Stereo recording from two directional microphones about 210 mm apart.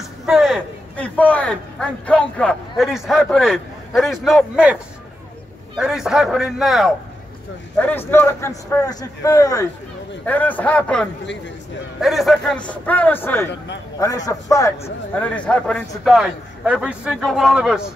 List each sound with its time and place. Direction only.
0.3 s a man's voice: centre (ahead or behind)
5.8 s a man's voice: centre (ahead or behind)